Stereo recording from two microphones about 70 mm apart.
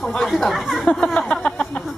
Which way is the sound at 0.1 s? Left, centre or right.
Centre.